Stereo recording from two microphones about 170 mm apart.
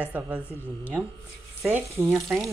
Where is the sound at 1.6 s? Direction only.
15° right (ahead or behind).